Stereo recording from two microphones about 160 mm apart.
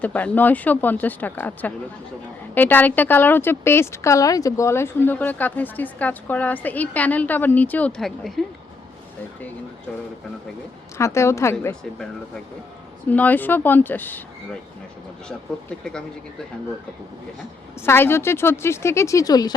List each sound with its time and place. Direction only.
0.0 s a woman's voice: 10° left (ahead or behind)
10.9 s a woman's voice: 15° left (ahead or behind)
11.6 s a woman's voice: 5° left (ahead or behind)
13.1 s a woman's voice: 10° left (ahead or behind)
15.8 s speech: 5° left (ahead or behind)
17.8 s a woman's voice: 15° left (ahead or behind)